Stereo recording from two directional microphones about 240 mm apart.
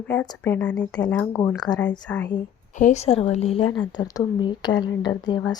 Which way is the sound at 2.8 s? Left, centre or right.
Left.